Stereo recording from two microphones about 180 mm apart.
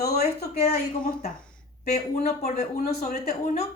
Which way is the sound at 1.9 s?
60° left (ahead or behind).